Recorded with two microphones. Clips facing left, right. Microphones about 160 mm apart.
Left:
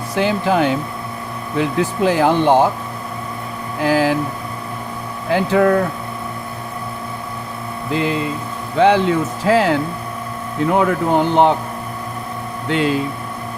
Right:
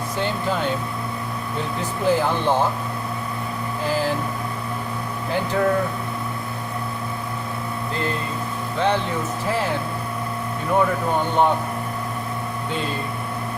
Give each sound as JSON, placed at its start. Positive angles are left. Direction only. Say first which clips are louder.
{"t": 0.2, "sound": "speech", "louder": "left 8 dB", "side_deg": 90}
{"t": 3.8, "sound": "speech", "louder": "left 8 dB", "side_deg": 90}
{"t": 5.3, "sound": "speech", "louder": "left 7 dB", "side_deg": 90}
{"t": 7.9, "sound": "speech", "louder": "left 8 dB", "side_deg": 90}
{"t": 10.8, "sound": "speech", "louder": "left 4 dB", "side_deg": 90}
{"t": 12.6, "sound": "speech", "louder": "left 11 dB", "side_deg": 85}